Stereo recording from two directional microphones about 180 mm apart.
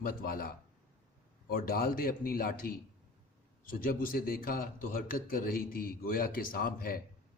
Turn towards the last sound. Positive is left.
turn(degrees=55)  # may be behind; listen again after turning